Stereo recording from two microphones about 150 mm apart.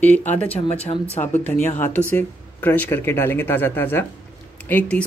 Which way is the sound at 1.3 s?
10° left (ahead or behind).